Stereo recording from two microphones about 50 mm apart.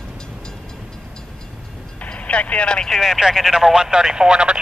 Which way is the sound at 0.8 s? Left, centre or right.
Centre.